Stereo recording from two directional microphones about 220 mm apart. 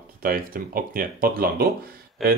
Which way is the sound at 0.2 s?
40° right (ahead or behind).